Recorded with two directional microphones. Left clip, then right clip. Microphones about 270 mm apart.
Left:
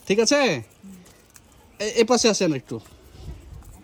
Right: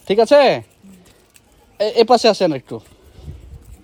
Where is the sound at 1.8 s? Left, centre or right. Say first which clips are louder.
Right 7 dB; centre.